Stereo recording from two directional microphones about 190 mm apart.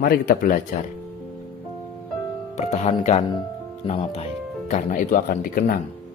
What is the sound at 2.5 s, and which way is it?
Speech, 35° left (ahead or behind).